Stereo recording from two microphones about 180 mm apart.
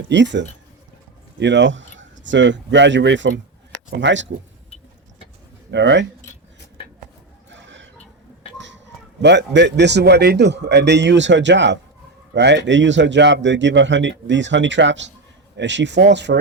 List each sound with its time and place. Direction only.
0.1 s a man's voice: 80° right
5.7 s a man's voice: 80° right
7.5 s a sound: 90° right
9.2 s a man's voice: 75° right (ahead or behind)